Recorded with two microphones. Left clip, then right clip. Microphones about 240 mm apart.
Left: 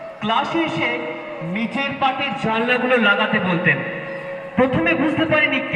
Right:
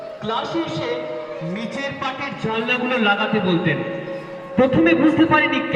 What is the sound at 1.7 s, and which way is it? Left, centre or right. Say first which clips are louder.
Speech: left 6 dB; left.